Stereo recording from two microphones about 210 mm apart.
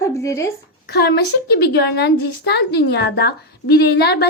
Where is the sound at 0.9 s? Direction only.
50° left (ahead or behind).